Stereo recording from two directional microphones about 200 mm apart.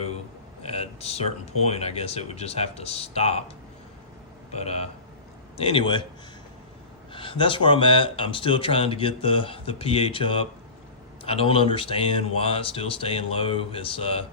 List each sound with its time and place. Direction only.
0.6 s speech: 30° left (ahead or behind)
4.5 s speech: 30° left (ahead or behind)
7.1 s speech: 25° left (ahead or behind)